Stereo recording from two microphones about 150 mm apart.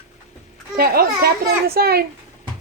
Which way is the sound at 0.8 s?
90° right.